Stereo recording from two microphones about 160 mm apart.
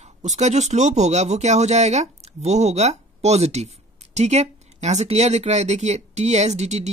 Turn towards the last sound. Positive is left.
turn(degrees=-45)  # may be behind; listen again after turning